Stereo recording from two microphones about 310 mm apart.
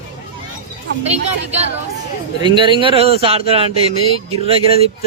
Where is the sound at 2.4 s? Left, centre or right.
Centre.